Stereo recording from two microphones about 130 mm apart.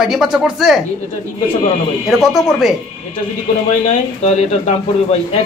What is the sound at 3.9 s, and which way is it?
Speech, 60° left (ahead or behind).